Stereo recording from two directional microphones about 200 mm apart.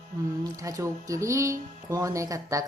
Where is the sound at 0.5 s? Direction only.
15° right (ahead or behind).